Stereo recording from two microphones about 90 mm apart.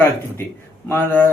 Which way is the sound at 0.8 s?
20° left (ahead or behind).